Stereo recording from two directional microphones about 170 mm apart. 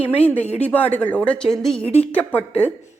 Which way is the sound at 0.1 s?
10° left (ahead or behind).